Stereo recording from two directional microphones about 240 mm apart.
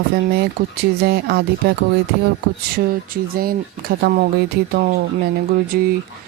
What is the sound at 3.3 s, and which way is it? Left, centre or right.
Speech, right.